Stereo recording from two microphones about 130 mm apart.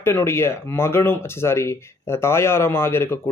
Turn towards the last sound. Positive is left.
turn(degrees=20)  # may be behind; listen again after turning